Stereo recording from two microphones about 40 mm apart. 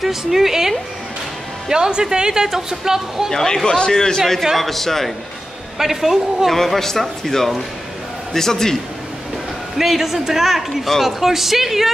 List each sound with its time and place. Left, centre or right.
0.0 s speech: centre
1.7 s speech: centre
3.3 s speech: centre
4.6 s a man's voice: centre
5.8 s speech: centre
6.5 s speech: centre
9.8 s a man's voice: centre